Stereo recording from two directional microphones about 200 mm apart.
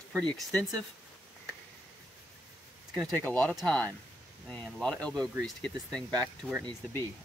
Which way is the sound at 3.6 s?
Centre (ahead or behind).